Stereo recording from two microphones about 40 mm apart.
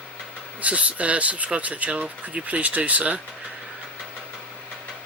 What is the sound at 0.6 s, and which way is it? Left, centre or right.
Speech, right.